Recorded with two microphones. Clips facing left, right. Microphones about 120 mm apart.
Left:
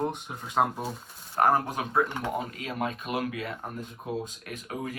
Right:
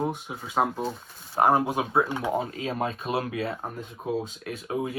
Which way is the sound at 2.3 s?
30° right (ahead or behind).